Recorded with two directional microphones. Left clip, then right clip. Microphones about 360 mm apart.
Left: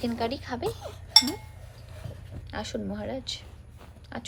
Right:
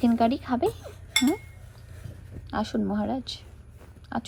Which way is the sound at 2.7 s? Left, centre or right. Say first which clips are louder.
Right 3 dB; right.